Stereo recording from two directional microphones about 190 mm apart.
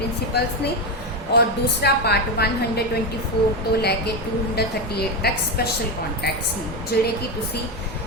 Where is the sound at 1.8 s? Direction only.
55° left (ahead or behind).